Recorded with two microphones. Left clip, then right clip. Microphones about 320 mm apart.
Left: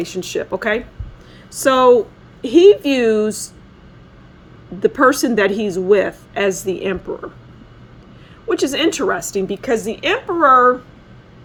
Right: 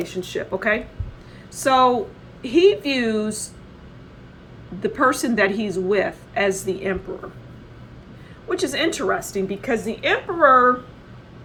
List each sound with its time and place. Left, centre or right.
0.0 s a woman's voice: left
2.4 s a woman's voice: left
2.9 s speech: left
4.9 s speech: left
8.5 s a woman's voice: left